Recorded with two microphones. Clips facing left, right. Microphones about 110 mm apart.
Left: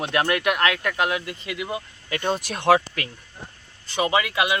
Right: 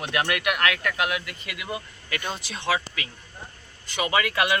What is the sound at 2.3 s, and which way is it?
Speech, 55° left (ahead or behind).